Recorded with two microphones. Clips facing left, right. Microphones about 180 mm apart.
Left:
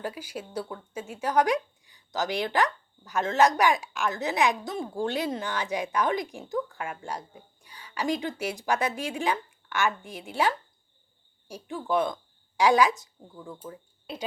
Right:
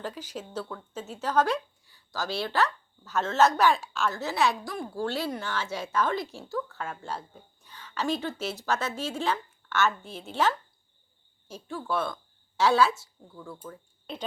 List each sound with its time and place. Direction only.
0.0 s a woman's voice: 10° left (ahead or behind)